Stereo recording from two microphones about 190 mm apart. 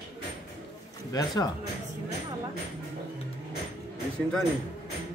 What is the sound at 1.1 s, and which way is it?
Speech, 20° left (ahead or behind).